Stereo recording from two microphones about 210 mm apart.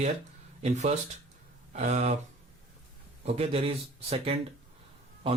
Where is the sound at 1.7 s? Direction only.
35° right (ahead or behind).